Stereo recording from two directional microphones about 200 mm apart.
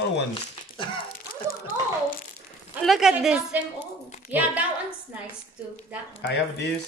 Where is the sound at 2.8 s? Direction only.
Centre (ahead or behind).